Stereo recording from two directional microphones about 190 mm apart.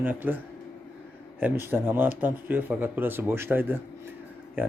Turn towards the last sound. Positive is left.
turn(degrees=-10)  # may be behind; listen again after turning